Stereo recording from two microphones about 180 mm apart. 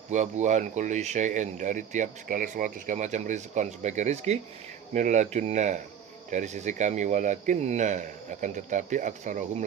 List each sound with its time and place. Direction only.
0.1 s speech: 40° right (ahead or behind)